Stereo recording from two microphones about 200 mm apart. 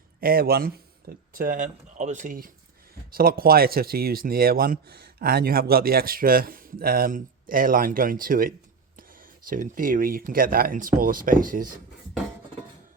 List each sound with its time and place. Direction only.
0.2 s speech: 50° right (ahead or behind)